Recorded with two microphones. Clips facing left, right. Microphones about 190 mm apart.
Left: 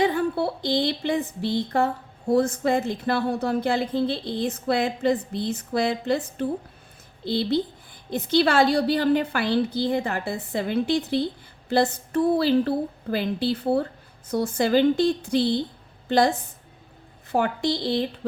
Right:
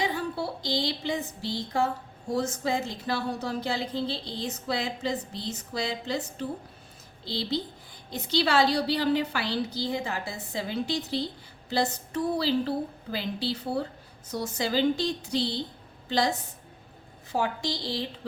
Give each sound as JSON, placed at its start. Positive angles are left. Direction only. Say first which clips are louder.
{"t": 0.0, "sound": "a woman's voice", "louder": "left 7 dB", "side_deg": 55}
{"t": 17.3, "sound": "a woman's voice", "louder": "left 6 dB", "side_deg": 55}